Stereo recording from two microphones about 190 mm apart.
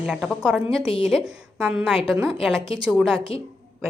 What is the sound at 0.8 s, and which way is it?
Speech, 25° left (ahead or behind).